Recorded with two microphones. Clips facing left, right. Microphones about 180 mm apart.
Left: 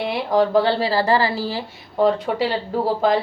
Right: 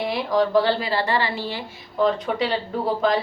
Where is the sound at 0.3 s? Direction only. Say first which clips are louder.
Left 2 dB; 30° left (ahead or behind).